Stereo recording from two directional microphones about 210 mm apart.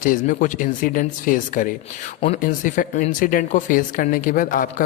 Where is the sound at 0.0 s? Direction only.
40° left (ahead or behind).